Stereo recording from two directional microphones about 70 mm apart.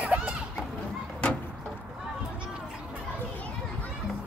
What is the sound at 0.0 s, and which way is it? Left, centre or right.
Children playing, right.